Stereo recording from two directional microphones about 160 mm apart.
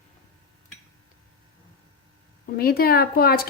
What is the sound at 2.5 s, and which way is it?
Speech, 70° left (ahead or behind).